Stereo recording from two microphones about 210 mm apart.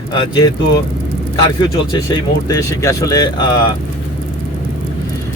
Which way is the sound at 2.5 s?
15° left (ahead or behind).